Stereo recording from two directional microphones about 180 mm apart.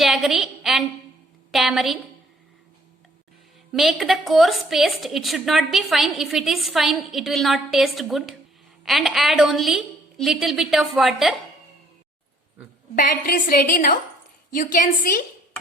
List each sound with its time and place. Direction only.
0.0 s a woman's voice: centre (ahead or behind)
3.7 s a woman's voice: centre (ahead or behind)
13.0 s a woman's voice: 55° left (ahead or behind)